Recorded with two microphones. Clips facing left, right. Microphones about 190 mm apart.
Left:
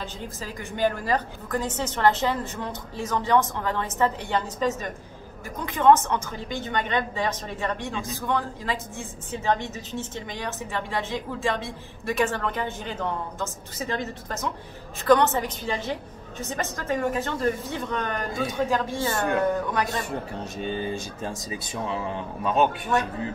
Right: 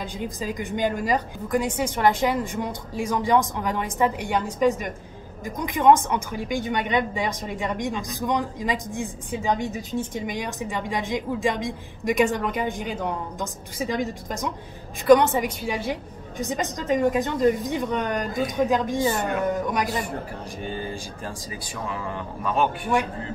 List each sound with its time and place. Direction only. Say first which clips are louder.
0.0 s a woman's voice: right 5 dB; 15° right (ahead or behind)
20.5 s speech: left 3 dB; 20° left (ahead or behind)